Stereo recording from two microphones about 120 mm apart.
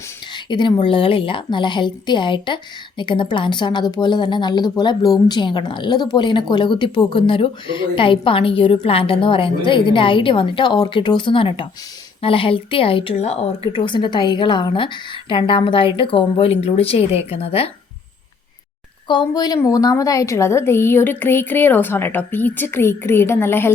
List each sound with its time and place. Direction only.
0.3 s a woman's voice: 40° left (ahead or behind)
13.1 s a woman's voice: 65° left (ahead or behind)
19.0 s a woman's voice: 35° left (ahead or behind); by 23.7 s 20° left (ahead or behind)